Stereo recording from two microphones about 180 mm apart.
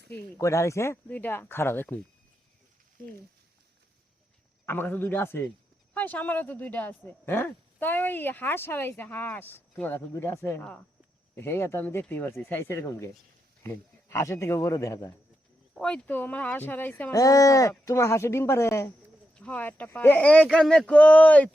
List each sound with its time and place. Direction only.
0.3 s speech: 15° left (ahead or behind)
4.6 s a man's voice: 10° left (ahead or behind)
15.7 s speech: 5° left (ahead or behind)